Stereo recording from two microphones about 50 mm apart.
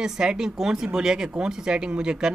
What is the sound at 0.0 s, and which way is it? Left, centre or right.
Speech, centre.